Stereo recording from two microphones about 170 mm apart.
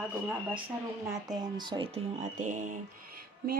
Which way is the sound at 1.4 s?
25° right (ahead or behind).